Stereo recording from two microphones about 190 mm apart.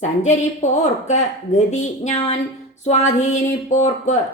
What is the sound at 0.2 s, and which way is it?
Speech, 40° left (ahead or behind).